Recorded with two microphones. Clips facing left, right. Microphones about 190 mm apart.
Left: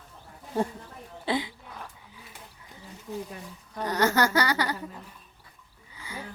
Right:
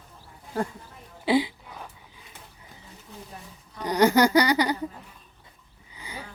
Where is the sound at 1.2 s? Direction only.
10° right (ahead or behind).